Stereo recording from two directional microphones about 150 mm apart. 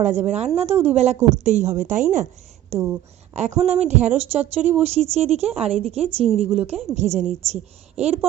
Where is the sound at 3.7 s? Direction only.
50° right (ahead or behind).